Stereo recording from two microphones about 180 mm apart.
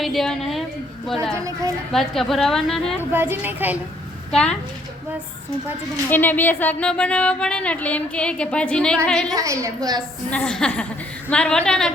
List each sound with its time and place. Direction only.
0.0 s a woman's voice: centre (ahead or behind)
1.4 s a woman's voice: 15° right (ahead or behind)
1.9 s a woman's voice: centre (ahead or behind)
3.0 s a woman's voice: 10° right (ahead or behind)
4.3 s a woman's voice: 5° left (ahead or behind)
6.1 s speech: 10° left (ahead or behind)
9.3 s a woman's voice: 15° right (ahead or behind)
10.2 s a woman's voice: 5° left (ahead or behind)